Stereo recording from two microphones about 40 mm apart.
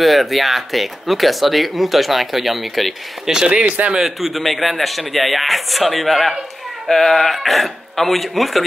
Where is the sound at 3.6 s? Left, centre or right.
Right.